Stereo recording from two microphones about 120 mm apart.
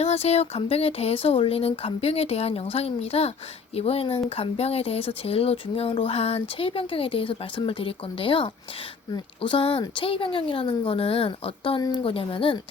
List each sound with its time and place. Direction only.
0.0 s speech: 60° left (ahead or behind)